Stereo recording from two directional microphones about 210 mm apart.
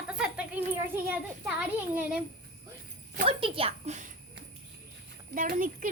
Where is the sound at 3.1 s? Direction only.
25° right (ahead or behind).